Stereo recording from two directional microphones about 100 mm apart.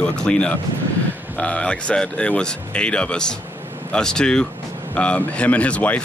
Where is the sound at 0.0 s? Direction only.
10° left (ahead or behind).